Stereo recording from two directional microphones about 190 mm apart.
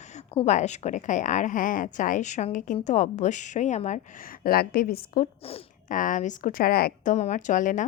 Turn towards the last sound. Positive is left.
turn(degrees=40)  # may be behind; listen again after turning